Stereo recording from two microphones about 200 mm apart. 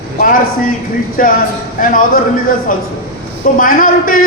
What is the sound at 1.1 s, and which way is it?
A man's voice, 45° left (ahead or behind).